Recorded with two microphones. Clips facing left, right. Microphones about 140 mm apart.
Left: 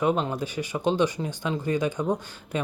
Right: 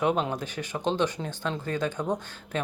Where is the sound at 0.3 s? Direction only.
10° left (ahead or behind).